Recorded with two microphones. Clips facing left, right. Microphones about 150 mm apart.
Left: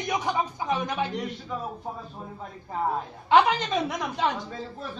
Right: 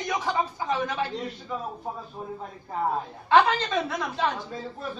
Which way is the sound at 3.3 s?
15° left (ahead or behind).